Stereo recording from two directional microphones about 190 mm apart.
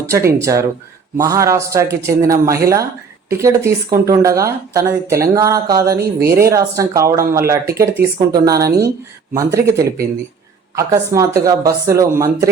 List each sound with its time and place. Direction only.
0.1 s speech: 15° right (ahead or behind)
6.0 s speech: 55° right (ahead or behind)
6.3 s speech: 15° right (ahead or behind)